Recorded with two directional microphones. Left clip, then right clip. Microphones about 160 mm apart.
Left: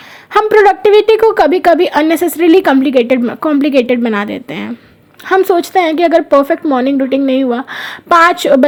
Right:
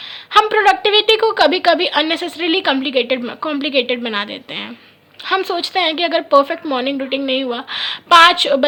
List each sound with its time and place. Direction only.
0.3 s a woman's voice: 25° left (ahead or behind)